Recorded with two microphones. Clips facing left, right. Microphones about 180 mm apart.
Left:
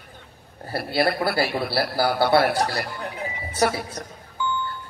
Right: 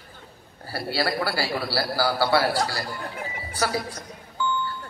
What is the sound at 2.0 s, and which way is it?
Speech, 65° left (ahead or behind).